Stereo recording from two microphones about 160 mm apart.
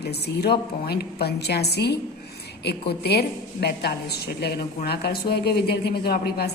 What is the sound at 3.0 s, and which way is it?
A woman's voice, 85° left.